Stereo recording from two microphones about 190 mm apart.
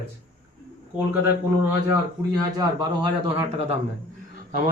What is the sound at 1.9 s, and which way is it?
A man's voice, 20° right (ahead or behind).